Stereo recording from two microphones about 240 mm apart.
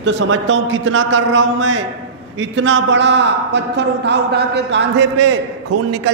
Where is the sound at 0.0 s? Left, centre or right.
Right.